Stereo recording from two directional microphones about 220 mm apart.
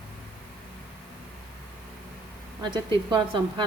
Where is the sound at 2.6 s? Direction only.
20° right (ahead or behind).